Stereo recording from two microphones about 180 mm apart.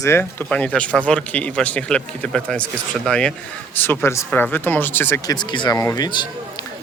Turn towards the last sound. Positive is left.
turn(degrees=20)  # may be behind; listen again after turning